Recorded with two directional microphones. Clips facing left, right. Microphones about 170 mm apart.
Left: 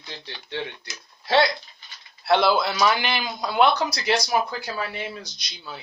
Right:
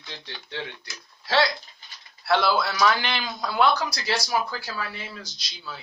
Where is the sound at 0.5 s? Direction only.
20° left (ahead or behind).